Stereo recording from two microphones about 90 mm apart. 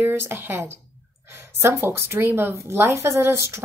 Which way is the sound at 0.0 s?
25° right (ahead or behind).